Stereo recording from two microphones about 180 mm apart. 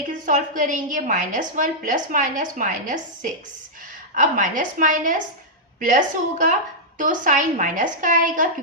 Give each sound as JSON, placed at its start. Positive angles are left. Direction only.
{"t": 0.1, "sound": "a woman's voice", "side_deg": -45}